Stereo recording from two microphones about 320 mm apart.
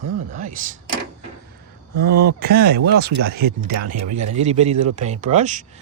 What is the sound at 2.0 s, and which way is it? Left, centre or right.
Speech, right.